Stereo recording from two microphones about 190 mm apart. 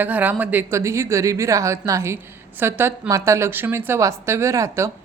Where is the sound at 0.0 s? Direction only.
10° right (ahead or behind).